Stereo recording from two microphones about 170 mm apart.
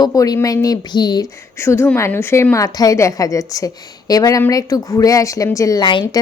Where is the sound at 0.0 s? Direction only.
20° left (ahead or behind).